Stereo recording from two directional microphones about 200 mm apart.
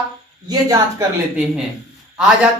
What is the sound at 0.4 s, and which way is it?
Speech, 15° right (ahead or behind).